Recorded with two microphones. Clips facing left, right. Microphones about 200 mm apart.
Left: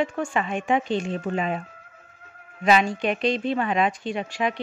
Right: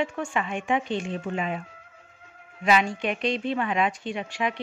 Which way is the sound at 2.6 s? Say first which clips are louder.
Left 3 dB; 40° left (ahead or behind).